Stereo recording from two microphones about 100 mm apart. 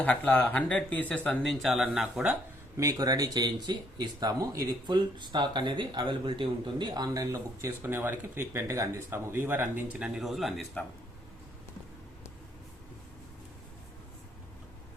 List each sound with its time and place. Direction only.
0.0 s speech: 10° left (ahead or behind); by 2.2 s 5° right (ahead or behind)
2.7 s speech: 35° right (ahead or behind)
4.9 s speech: 50° right (ahead or behind); by 10.1 s 15° right (ahead or behind)
10.2 s speech: centre (ahead or behind)